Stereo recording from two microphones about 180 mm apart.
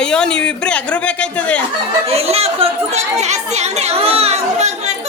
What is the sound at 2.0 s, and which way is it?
Chatter, 35° right (ahead or behind).